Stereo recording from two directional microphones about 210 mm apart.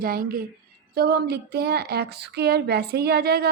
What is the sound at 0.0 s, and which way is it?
A woman's voice, 45° right (ahead or behind).